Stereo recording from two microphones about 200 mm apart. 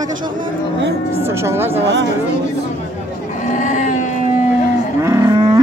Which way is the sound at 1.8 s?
60° right (ahead or behind).